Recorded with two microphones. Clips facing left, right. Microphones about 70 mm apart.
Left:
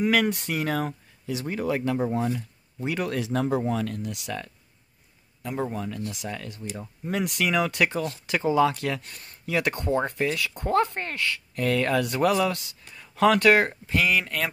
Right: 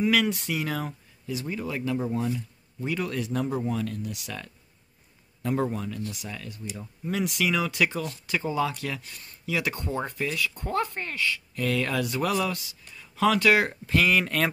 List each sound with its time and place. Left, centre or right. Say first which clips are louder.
0.0 s speech: left 1 dB; left
2.0 s speech: left 2 dB; left
2.9 s speech: left 2 dB; left
5.4 s speech: right 3 dB; centre
5.7 s speech: even; left
6.4 s speech: left 2 dB; left
11.0 s speech: even; left
12.4 s speech: left 3 dB; left
12.9 s speech: left 3 dB; left
13.7 s speech: right 1 dB; centre
14.2 s a sound: right 3 dB; centre